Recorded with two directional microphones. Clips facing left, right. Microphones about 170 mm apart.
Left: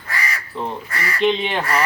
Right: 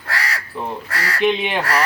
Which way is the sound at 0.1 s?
75° right (ahead or behind).